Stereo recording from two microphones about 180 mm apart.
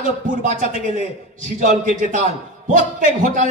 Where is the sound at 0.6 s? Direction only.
45° right (ahead or behind).